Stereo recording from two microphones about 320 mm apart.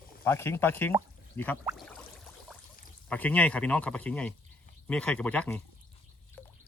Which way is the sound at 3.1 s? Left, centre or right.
Centre.